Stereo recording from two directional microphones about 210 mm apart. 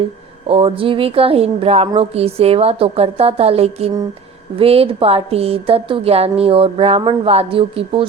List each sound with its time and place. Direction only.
0.4 s a woman's voice: 25° right (ahead or behind)